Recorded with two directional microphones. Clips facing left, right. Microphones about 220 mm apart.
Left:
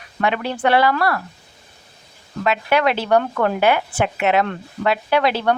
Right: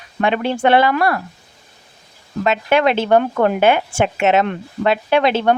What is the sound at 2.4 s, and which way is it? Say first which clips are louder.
Speech: right 3 dB; 25° right (ahead or behind).